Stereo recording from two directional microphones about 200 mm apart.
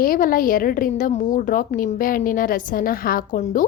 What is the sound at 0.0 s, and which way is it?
A woman's voice, 45° left (ahead or behind).